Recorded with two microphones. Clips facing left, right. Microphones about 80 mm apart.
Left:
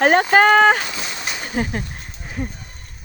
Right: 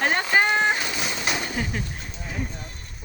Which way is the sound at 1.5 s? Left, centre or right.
Left.